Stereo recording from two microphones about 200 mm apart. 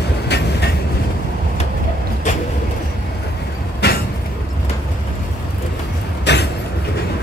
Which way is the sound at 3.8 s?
55° left (ahead or behind).